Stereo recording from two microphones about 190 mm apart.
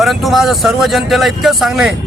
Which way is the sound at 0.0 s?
Centre (ahead or behind).